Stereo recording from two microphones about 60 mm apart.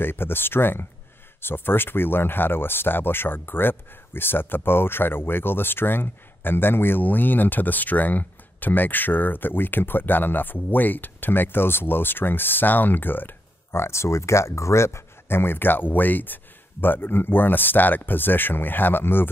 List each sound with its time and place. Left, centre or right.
0.0 s speech: left